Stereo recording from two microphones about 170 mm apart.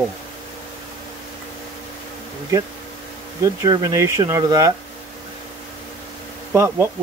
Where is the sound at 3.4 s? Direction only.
20° right (ahead or behind).